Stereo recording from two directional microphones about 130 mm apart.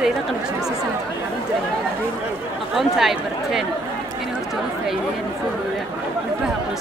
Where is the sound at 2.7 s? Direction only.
Centre (ahead or behind).